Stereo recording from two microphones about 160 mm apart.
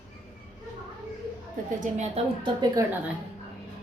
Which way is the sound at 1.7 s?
50° right (ahead or behind).